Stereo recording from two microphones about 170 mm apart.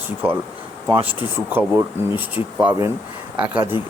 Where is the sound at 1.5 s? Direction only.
10° right (ahead or behind).